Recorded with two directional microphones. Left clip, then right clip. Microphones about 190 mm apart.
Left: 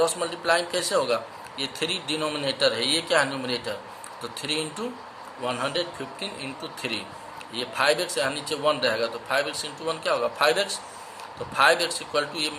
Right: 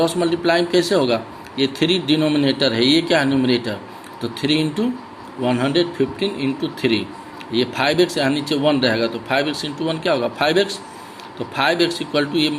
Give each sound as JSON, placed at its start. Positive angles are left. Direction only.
{"t": 0.0, "sound": "a man's voice", "side_deg": -10}